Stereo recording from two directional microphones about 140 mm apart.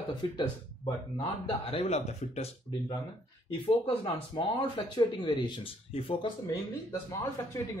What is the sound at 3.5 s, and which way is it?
Speech, 45° left (ahead or behind).